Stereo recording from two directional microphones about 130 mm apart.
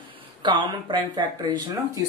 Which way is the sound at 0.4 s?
35° right (ahead or behind).